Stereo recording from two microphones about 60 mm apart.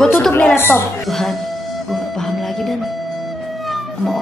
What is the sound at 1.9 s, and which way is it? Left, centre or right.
Music, centre.